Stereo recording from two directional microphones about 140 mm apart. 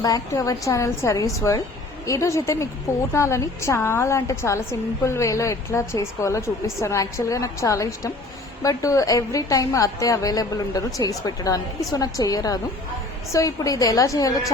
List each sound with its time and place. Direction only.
0.0 s a woman's voice: 25° left (ahead or behind)